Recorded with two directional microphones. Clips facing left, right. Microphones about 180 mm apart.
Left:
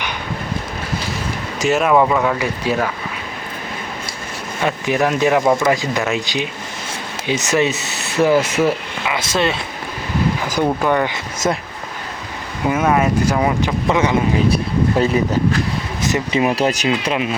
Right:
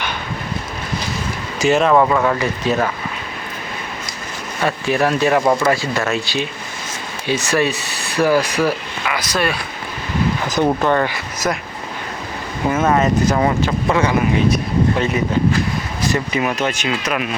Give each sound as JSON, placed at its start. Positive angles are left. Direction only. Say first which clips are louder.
{"t": 1.5, "sound": "speech", "louder": "right 1 dB", "side_deg": 0}
{"t": 4.6, "sound": "speech", "louder": "even", "side_deg": 20}
{"t": 10.8, "sound": "speech", "louder": "even", "side_deg": 10}
{"t": 11.1, "sound": "speech", "louder": "left 2 dB", "side_deg": 25}
{"t": 12.6, "sound": "speech", "louder": "even", "side_deg": 10}
{"t": 14.5, "sound": "speech", "louder": "even", "side_deg": 35}
{"t": 16.0, "sound": "speech", "louder": "left 2 dB", "side_deg": 25}